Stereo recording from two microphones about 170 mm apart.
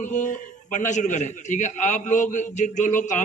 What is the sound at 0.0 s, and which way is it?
A man's voice, 45° left (ahead or behind).